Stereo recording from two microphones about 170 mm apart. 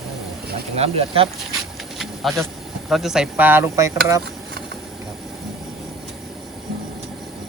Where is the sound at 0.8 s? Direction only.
35° right (ahead or behind).